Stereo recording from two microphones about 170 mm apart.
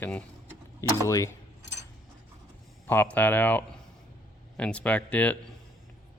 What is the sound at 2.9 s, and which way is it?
Speech, 10° left (ahead or behind).